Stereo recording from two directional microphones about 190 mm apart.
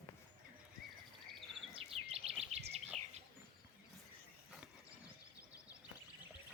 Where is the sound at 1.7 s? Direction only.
30° right (ahead or behind).